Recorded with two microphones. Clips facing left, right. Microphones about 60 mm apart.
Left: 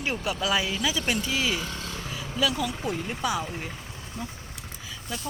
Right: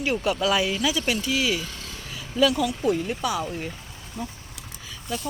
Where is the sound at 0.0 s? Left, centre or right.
Left.